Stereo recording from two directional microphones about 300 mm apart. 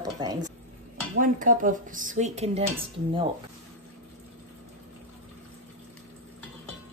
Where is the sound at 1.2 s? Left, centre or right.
Right.